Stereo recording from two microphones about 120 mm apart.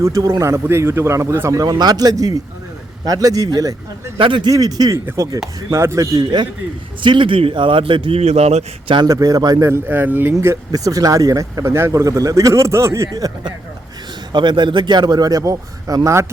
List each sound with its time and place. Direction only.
0.0 s a man's voice: 25° right (ahead or behind)
4.2 s a man's voice: 40° right (ahead or behind)
4.5 s a man's voice: 30° right (ahead or behind); by 8.6 s 60° right (ahead or behind)
9.0 s speech: 30° right (ahead or behind)
14.3 s a man's voice: 40° right (ahead or behind)